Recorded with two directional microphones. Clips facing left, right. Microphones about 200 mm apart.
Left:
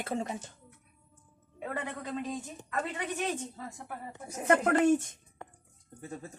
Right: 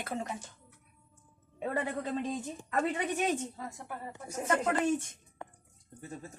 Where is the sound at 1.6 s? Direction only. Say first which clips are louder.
Right 4 dB; 30° right (ahead or behind).